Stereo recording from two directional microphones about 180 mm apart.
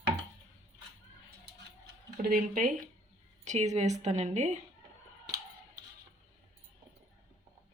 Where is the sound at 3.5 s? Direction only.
40° right (ahead or behind).